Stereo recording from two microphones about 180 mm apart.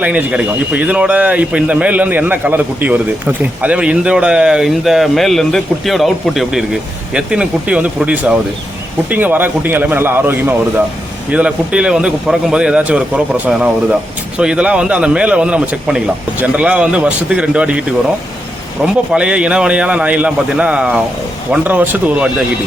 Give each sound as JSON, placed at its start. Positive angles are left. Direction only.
{"t": 0.0, "sound": "a man's voice", "side_deg": -5}
{"t": 19.1, "sound": "speech", "side_deg": -5}